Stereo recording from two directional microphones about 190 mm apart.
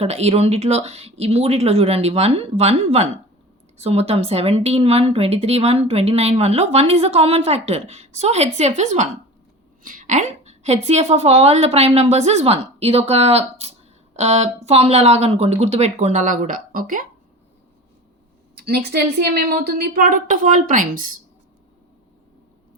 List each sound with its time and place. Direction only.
0.0 s a woman's voice: 35° right (ahead or behind)
9.8 s a sound: 45° right (ahead or behind)
10.8 s a woman's voice: 35° right (ahead or behind)
18.5 s a woman's voice: 55° right (ahead or behind)